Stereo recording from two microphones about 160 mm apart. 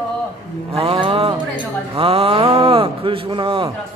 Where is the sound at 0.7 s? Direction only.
35° right (ahead or behind).